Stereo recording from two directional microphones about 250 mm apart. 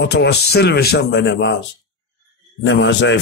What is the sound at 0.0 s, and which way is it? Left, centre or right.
A man's voice, left.